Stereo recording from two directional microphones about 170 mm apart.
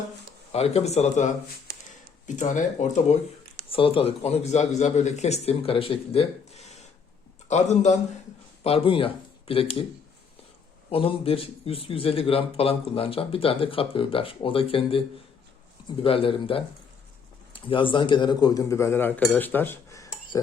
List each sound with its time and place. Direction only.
0.5 s a man's voice: 40° left (ahead or behind)
3.7 s a man's voice: 30° left (ahead or behind)
10.9 s a man's voice: 35° left (ahead or behind)
16.0 s a man's voice: 35° left (ahead or behind); by 19.2 s 10° left (ahead or behind)
19.2 s cutlery: 10° left (ahead or behind)